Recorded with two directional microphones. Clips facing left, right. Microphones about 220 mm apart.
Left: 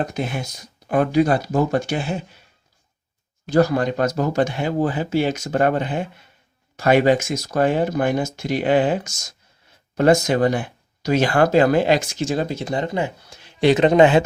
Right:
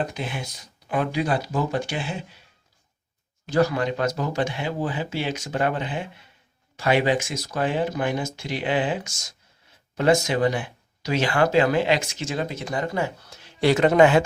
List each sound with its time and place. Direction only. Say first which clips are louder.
0.0 s speech: left 4 dB; 45° left (ahead or behind)
3.4 s speech: left 4 dB; 40° left (ahead or behind); by 14.2 s 20° left (ahead or behind)